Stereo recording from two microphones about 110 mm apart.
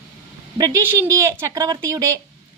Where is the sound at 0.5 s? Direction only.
35° right (ahead or behind).